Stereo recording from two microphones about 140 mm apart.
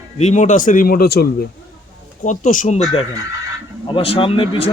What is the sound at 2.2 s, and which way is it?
Speech, 65° left (ahead or behind).